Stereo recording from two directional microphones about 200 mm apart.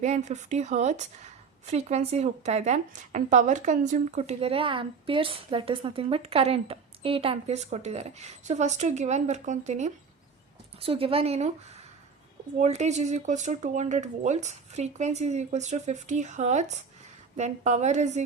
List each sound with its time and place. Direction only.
0.0 s a woman's voice: 35° right (ahead or behind)